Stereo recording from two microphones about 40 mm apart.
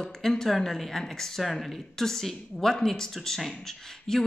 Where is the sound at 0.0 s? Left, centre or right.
Centre.